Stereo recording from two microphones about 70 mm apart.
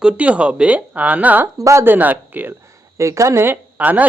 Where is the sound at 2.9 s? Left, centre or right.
Right.